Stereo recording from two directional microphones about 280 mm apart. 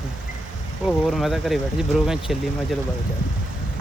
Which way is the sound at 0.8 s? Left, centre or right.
Centre.